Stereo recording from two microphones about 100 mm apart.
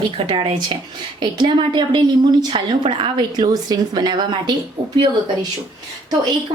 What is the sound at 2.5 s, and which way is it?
Speech, 70° right (ahead or behind).